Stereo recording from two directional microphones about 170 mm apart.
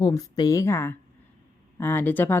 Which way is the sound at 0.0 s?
20° left (ahead or behind).